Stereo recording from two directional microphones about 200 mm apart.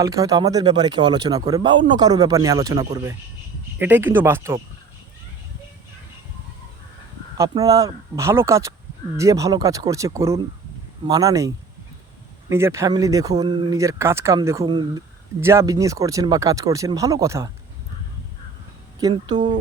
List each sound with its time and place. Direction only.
0.0 s speech: 15° right (ahead or behind)
7.3 s speech: 20° right (ahead or behind)
18.9 s speech: 20° right (ahead or behind)